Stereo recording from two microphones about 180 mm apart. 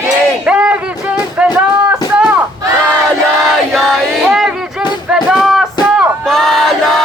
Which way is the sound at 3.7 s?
Centre (ahead or behind).